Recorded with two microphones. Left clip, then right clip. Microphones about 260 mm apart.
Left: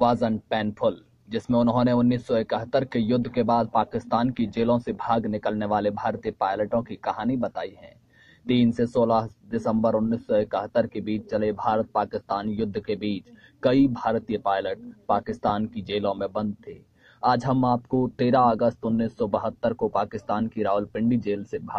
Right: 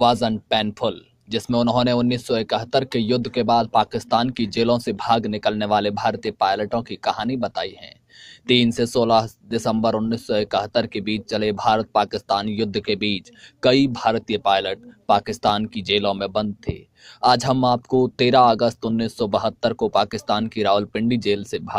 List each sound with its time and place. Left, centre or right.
0.0 s speech: right